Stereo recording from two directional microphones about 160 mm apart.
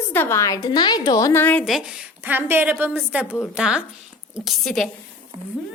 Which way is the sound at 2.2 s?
10° right (ahead or behind).